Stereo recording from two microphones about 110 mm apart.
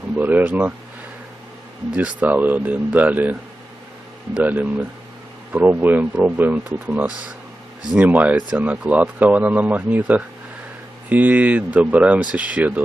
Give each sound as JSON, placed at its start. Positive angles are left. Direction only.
{"t": 0.2, "sound": "speech", "side_deg": -15}
{"t": 2.0, "sound": "speech", "side_deg": -15}
{"t": 4.4, "sound": "speech", "side_deg": -15}